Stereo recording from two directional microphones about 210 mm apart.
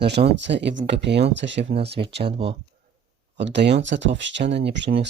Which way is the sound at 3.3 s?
55° right (ahead or behind).